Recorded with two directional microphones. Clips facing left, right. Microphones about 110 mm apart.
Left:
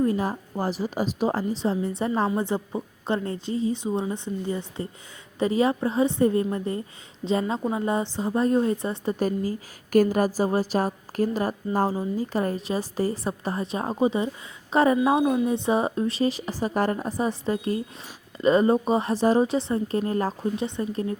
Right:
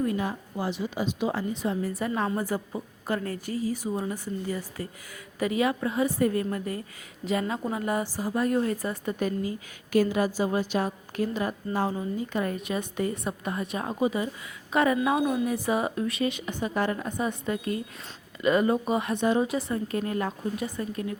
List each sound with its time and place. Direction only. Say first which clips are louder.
0.0 s a woman's voice: left 4 dB; 35° left (ahead or behind)